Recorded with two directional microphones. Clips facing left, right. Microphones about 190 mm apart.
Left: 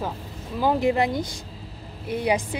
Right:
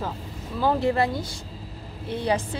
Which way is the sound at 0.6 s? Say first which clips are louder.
Left 1 dB; 15° left (ahead or behind).